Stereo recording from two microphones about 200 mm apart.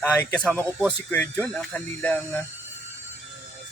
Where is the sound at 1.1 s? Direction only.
10° left (ahead or behind).